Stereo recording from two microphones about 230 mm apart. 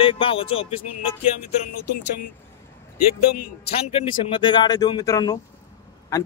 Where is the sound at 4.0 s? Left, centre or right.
Left.